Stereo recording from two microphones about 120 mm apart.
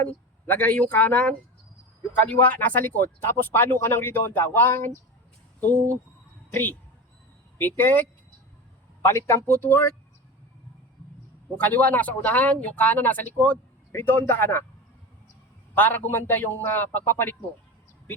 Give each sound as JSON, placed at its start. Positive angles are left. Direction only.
{"t": 0.0, "sound": "speech", "side_deg": 15}
{"t": 6.5, "sound": "speech", "side_deg": 15}
{"t": 11.5, "sound": "speech", "side_deg": 15}
{"t": 15.7, "sound": "speech", "side_deg": 15}